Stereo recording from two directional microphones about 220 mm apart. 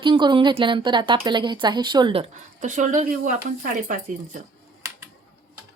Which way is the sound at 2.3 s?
35° right (ahead or behind).